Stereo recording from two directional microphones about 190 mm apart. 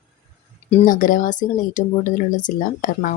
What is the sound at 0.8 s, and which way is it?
Speech, 45° left (ahead or behind).